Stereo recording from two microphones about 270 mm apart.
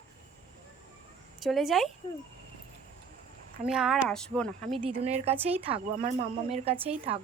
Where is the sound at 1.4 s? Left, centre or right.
Centre.